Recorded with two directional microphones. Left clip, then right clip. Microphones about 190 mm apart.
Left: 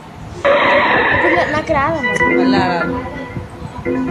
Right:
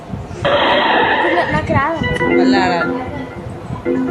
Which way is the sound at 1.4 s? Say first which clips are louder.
Left 1 dB; 50° left (ahead or behind).